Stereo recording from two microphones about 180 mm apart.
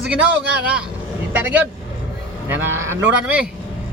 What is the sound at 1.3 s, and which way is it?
Speech, 10° right (ahead or behind).